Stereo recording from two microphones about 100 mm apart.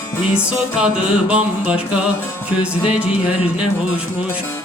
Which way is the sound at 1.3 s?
10° right (ahead or behind).